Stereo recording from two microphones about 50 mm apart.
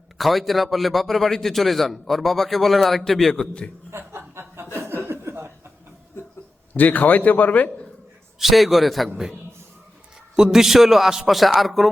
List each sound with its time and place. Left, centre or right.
0.2 s a man's voice: centre
3.9 s chuckle: right
6.7 s a man's voice: left
8.4 s a man's voice: centre
10.3 s a man's voice: centre